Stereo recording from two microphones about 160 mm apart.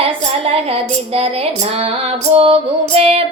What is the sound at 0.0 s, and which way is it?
Music, 35° right (ahead or behind).